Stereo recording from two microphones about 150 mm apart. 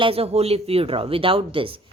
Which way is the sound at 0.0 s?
40° right (ahead or behind).